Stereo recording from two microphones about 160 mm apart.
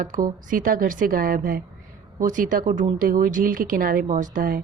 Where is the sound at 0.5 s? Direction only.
60° right (ahead or behind).